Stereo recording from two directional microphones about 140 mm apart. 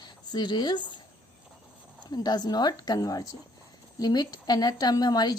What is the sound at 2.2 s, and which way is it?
Speech, 30° left (ahead or behind).